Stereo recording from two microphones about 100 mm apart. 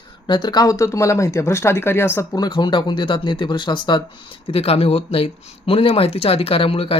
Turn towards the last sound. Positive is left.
turn(degrees=70)  # may be behind; listen again after turning